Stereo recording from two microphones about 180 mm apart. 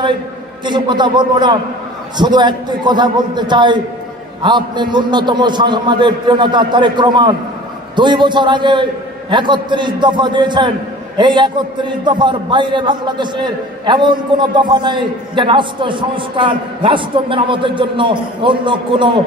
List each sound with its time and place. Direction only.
0.7 s a man's voice: 25° right (ahead or behind)